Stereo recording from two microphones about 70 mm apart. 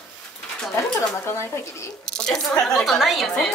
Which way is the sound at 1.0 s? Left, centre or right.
Left.